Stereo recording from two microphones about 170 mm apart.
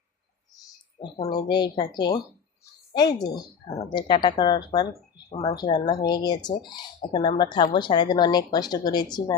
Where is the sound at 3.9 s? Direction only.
25° left (ahead or behind).